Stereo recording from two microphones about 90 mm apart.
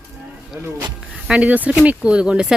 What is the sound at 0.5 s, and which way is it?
Speech, 30° right (ahead or behind).